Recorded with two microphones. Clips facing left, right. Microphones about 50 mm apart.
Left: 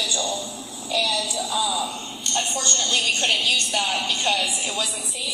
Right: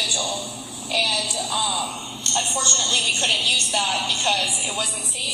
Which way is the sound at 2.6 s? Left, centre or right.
Left.